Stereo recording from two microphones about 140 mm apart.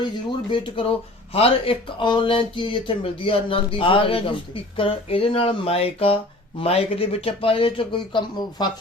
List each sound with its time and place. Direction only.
0.0 s speech: 35° left (ahead or behind)